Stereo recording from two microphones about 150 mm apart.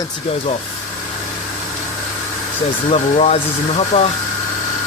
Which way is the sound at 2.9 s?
45° left (ahead or behind).